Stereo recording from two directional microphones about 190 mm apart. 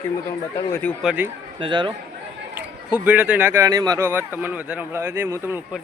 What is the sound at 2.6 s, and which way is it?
Speech, 10° right (ahead or behind).